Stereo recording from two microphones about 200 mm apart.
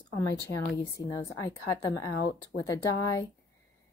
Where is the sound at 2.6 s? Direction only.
15° left (ahead or behind).